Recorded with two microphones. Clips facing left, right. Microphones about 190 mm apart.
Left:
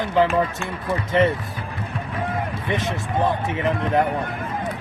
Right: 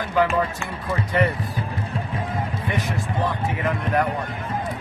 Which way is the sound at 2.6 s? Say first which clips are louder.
Left 1 dB; 25° left (ahead or behind).